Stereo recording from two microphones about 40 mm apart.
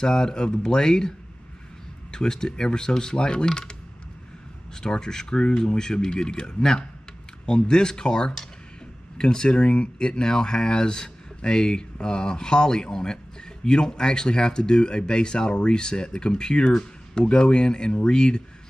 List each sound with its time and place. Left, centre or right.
0.0 s speech: centre
4.7 s speech: centre
10.0 s speech: centre